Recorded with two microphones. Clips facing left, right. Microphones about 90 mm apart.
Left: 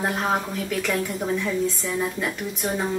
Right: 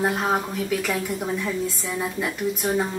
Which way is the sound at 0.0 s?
Centre (ahead or behind).